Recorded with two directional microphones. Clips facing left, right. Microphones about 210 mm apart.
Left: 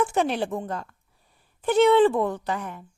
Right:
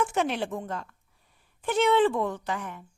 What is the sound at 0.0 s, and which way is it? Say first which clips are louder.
A woman's voice: left 3 dB; 35° left (ahead or behind).